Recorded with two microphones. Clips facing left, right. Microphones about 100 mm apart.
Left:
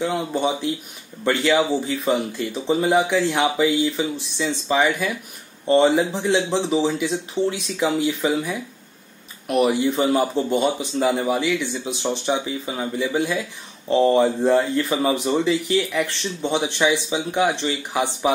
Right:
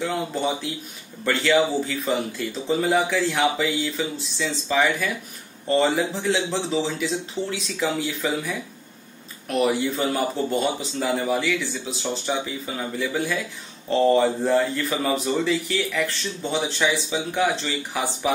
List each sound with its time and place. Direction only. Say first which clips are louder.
0.0 s speech: left 3 dB; 15° left (ahead or behind)
2.8 s speech: left 3 dB; 15° left (ahead or behind)
9.5 s speech: left 3 dB; 15° left (ahead or behind)